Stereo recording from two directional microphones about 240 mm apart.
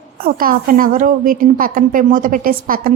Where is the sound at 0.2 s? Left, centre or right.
Right.